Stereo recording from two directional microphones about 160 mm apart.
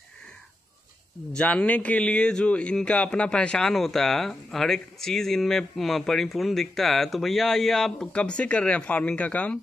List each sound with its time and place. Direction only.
1.3 s speech: 10° left (ahead or behind)